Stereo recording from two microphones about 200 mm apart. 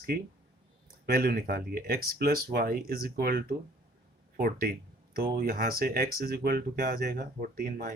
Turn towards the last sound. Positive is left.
turn(degrees=-45)  # may be behind; listen again after turning